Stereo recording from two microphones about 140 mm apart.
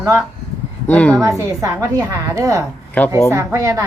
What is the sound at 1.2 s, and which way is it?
A woman's voice, 20° right (ahead or behind).